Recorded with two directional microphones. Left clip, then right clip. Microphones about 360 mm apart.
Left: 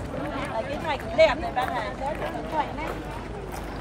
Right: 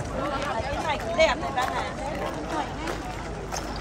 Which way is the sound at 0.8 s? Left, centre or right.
Left.